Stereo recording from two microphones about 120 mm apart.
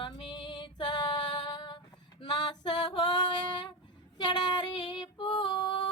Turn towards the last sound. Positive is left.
turn(degrees=40)  # may be behind; listen again after turning